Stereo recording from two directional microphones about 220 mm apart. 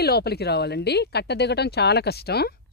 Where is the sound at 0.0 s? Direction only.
45° left (ahead or behind).